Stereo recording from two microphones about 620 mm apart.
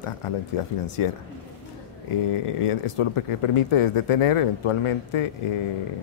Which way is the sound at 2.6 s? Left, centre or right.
Left.